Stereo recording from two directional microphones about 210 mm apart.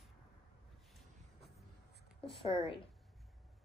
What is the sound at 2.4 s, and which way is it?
Speech, 15° right (ahead or behind).